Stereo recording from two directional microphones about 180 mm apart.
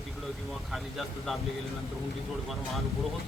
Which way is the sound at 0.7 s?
Centre (ahead or behind).